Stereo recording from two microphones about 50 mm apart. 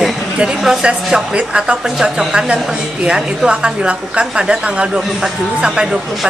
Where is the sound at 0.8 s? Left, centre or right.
Right.